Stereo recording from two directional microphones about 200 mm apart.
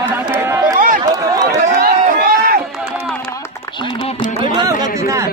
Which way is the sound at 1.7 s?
45° right (ahead or behind).